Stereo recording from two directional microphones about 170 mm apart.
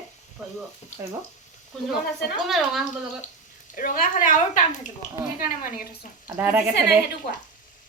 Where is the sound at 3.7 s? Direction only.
50° left (ahead or behind).